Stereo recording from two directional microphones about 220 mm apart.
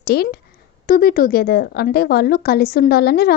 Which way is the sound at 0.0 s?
45° left (ahead or behind).